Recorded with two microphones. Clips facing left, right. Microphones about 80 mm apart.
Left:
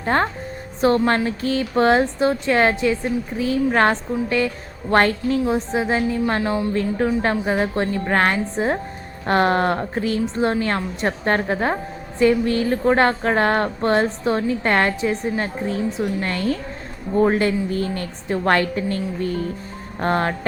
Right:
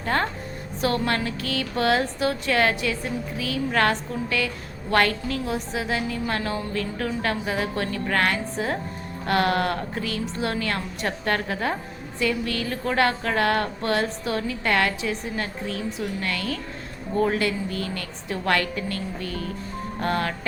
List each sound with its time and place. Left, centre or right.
0.0 s a woman's voice: left